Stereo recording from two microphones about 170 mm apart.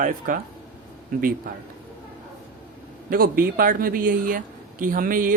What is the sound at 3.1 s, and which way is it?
Speech, 60° right (ahead or behind).